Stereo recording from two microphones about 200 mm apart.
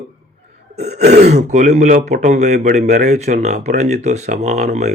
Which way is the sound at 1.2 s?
35° right (ahead or behind).